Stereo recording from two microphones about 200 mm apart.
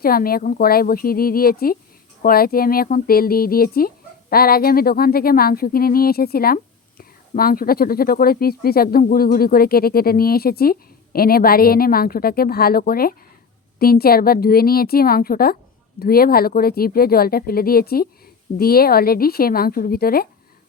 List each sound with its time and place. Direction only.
0.0 s a woman's voice: 50° left (ahead or behind)